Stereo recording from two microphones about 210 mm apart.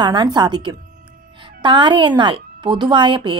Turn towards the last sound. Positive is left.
turn(degrees=-25)  # may be behind; listen again after turning